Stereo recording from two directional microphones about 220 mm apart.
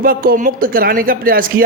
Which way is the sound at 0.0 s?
40° right (ahead or behind).